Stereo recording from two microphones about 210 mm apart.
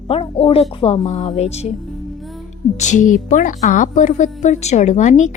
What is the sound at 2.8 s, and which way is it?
A woman's voice, 35° left (ahead or behind).